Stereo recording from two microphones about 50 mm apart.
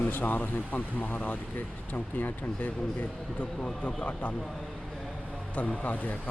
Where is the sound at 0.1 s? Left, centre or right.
Left.